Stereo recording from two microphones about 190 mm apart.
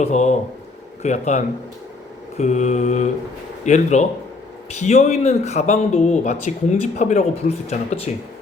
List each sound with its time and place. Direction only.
0.0 s speech: 40° left (ahead or behind)